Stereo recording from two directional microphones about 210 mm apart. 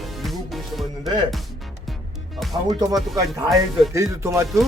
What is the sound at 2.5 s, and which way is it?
Speech, 15° right (ahead or behind).